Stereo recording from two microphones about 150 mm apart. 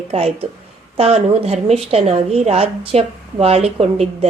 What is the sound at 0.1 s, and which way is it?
Speech, 40° right (ahead or behind).